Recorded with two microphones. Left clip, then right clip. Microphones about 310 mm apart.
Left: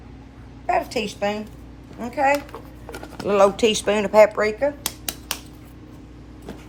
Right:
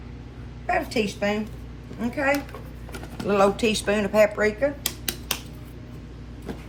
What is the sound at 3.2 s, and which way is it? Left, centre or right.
Speech, left.